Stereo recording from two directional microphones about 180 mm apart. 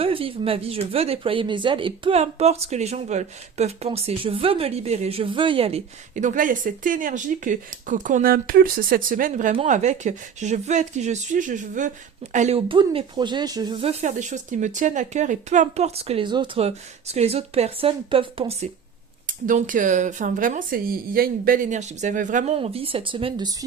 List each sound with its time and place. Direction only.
0.0 s speech: 30° right (ahead or behind)
14.0 s speech: 40° right (ahead or behind)
19.3 s speech: 50° right (ahead or behind)
22.5 s speech: 30° right (ahead or behind)